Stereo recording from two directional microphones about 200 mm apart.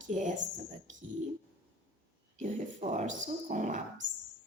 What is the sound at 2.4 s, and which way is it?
A woman's voice, 35° right (ahead or behind).